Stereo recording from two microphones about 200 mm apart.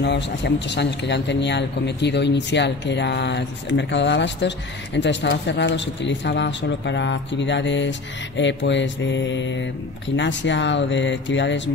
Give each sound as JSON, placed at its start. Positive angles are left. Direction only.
{"t": 0.0, "sound": "a man's voice", "side_deg": 60}